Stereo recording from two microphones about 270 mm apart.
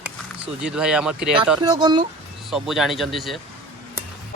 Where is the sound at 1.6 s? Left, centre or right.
Centre.